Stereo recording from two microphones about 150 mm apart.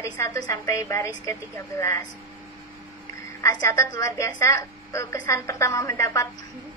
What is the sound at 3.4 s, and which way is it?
A woman's voice, 20° left (ahead or behind).